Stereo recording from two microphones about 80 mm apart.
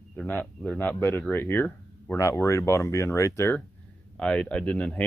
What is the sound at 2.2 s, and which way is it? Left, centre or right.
Speech, left.